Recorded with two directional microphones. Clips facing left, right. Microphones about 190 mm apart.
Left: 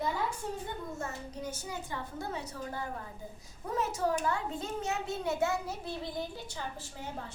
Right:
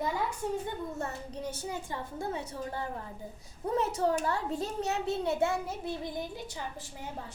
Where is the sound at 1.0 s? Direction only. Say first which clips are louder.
Right 2 dB; 30° right (ahead or behind).